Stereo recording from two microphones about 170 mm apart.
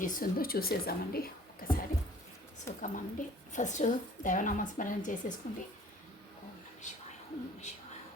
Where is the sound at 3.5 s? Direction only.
45° left (ahead or behind).